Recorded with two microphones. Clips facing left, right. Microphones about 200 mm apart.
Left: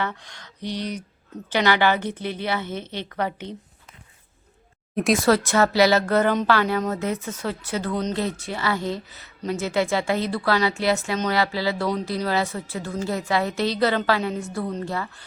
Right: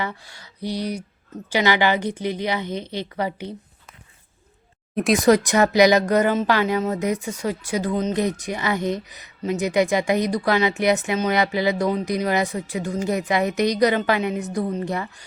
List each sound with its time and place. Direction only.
0.0 s speech: 10° right (ahead or behind)
5.1 s speech: 15° right (ahead or behind)